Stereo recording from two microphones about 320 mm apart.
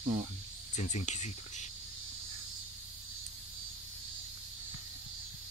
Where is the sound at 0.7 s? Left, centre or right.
Left.